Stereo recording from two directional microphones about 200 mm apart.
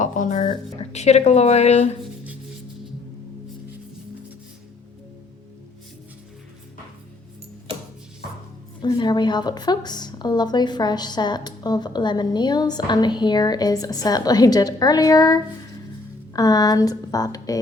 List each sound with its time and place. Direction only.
0.0 s speech: 40° left (ahead or behind)
8.8 s a woman's voice: 20° left (ahead or behind)